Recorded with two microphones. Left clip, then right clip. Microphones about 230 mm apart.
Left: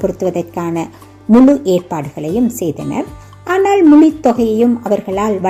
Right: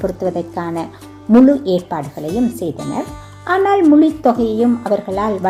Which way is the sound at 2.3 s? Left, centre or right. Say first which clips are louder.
Left 3 dB; centre.